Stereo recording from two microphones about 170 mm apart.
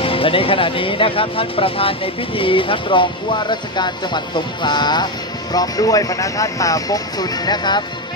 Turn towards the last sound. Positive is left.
turn(degrees=25)  # may be behind; listen again after turning